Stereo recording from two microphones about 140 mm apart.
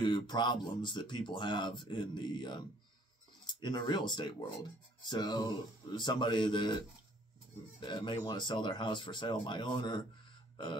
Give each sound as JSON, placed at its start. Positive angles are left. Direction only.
{"t": 0.0, "sound": "speech", "side_deg": 35}
{"t": 7.8, "sound": "speech", "side_deg": 35}